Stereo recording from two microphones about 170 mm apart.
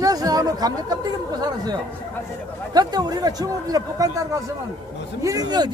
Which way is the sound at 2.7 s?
25° right (ahead or behind).